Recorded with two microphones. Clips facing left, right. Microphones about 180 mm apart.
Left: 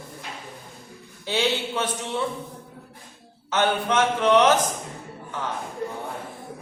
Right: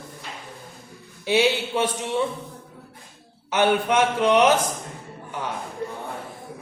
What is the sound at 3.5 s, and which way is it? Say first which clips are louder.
Speech: right 3 dB; 15° right (ahead or behind).